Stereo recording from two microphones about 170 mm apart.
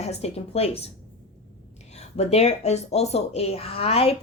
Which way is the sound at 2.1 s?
40° left (ahead or behind).